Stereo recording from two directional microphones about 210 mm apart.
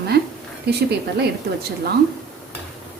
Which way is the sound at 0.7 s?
50° right (ahead or behind).